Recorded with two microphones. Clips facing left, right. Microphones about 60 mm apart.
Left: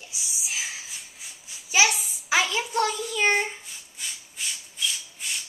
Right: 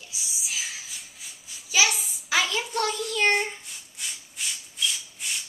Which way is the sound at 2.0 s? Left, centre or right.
Centre.